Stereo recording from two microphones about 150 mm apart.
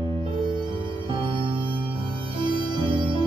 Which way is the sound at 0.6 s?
35° right (ahead or behind).